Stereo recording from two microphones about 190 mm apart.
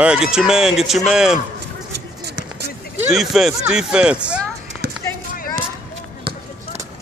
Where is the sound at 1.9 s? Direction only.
60° right (ahead or behind).